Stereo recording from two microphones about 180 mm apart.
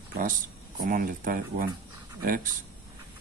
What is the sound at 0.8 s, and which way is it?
Speech, 50° right (ahead or behind).